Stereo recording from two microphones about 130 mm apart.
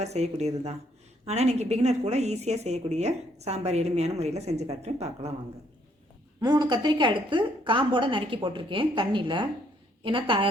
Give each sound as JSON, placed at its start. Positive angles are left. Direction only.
{"t": 0.0, "sound": "a woman's voice", "side_deg": -60}
{"t": 6.4, "sound": "a woman's voice", "side_deg": -35}